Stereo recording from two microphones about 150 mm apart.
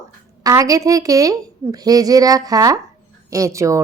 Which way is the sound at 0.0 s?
20° right (ahead or behind).